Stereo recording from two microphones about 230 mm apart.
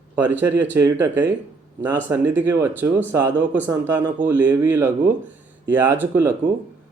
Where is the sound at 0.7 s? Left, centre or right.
Centre.